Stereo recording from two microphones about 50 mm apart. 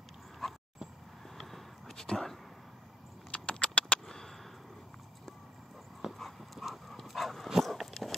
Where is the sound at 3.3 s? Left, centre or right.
Left.